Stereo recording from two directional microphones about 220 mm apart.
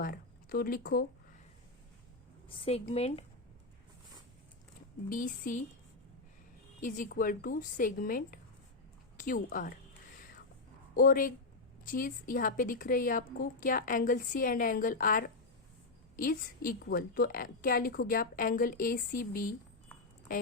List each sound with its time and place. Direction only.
0.0 s speech: 40° left (ahead or behind)
2.8 s speech: 30° left (ahead or behind)
5.0 s a woman's voice: 35° left (ahead or behind)
6.8 s a woman's voice: 35° left (ahead or behind)
10.9 s a woman's voice: 40° left (ahead or behind)